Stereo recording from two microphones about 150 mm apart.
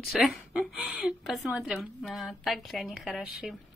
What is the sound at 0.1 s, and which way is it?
Speech, centre (ahead or behind).